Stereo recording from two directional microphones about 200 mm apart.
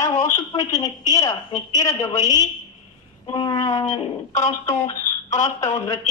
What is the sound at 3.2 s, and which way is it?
Speech, 25° left (ahead or behind).